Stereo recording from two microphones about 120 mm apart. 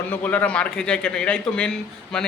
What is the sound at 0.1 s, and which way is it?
Speech, 15° left (ahead or behind).